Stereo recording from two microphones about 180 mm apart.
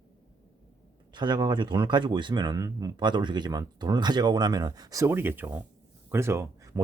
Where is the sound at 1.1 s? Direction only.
25° right (ahead or behind).